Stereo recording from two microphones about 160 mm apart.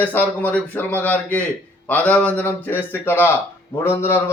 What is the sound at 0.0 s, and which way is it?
Speech, 10° left (ahead or behind).